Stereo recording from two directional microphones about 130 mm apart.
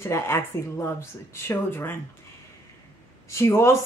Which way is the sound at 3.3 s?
20° left (ahead or behind).